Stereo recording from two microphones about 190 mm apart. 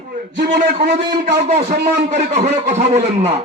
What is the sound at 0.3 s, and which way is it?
Speech, 65° right (ahead or behind).